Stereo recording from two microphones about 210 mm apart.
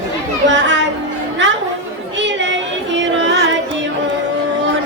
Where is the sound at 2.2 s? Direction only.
60° right (ahead or behind).